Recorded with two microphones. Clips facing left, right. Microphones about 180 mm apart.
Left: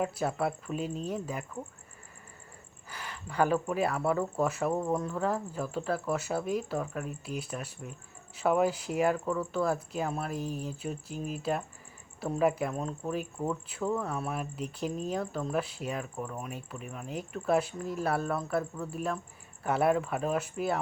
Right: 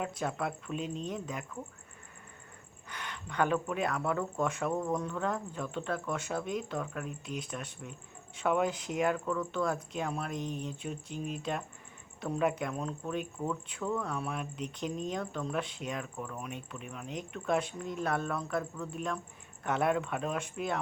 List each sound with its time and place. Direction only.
0.0 s speech: 5° left (ahead or behind)
2.9 s speech: 5° left (ahead or behind)
4.7 s speech: 30° left (ahead or behind)
4.9 s speech: 5° left (ahead or behind)
13.4 s speech: 30° left (ahead or behind)
13.9 s speech: 5° left (ahead or behind)
16.4 s speech: centre (ahead or behind)